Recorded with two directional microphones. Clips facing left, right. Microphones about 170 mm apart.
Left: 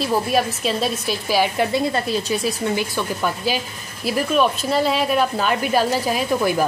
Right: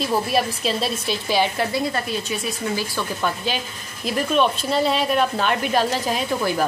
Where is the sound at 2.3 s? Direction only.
35° left (ahead or behind).